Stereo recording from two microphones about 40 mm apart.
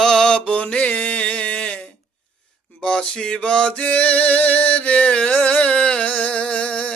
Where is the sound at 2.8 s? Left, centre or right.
Centre; by 5.8 s left.